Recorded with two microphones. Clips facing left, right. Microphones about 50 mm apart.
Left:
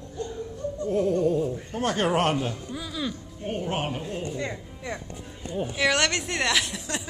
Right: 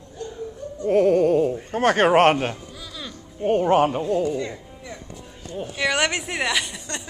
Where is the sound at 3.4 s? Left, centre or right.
Right.